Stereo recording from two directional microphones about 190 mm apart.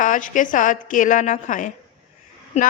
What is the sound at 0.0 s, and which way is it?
A woman's voice, 45° left (ahead or behind).